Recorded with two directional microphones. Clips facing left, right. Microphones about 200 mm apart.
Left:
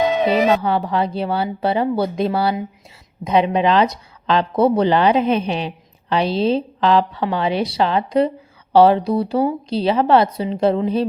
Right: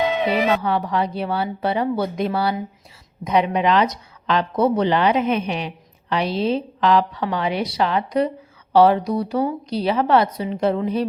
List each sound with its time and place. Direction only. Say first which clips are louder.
0.0 s speech: left 3 dB; 40° left (ahead or behind)